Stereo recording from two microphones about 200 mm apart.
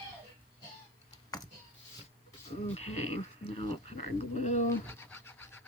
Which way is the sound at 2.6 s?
30° left (ahead or behind).